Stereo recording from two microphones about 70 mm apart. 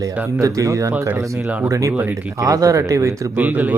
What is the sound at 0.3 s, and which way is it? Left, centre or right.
Speech, right.